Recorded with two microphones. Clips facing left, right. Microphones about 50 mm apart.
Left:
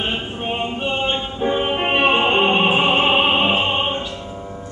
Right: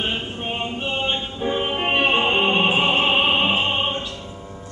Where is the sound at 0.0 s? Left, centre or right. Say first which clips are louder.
Left 2 dB; centre.